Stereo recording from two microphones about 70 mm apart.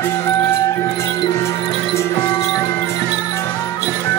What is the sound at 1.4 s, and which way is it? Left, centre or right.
Music, left.